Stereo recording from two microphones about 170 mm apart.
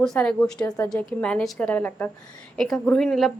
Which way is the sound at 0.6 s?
15° left (ahead or behind).